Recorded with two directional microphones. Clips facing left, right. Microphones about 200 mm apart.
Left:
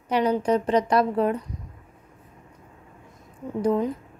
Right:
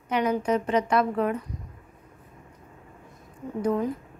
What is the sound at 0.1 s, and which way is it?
A woman's voice, 35° left (ahead or behind).